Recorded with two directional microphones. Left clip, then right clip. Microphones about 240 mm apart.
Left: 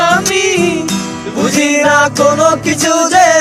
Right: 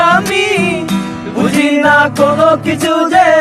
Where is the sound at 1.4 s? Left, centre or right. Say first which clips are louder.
Even; left.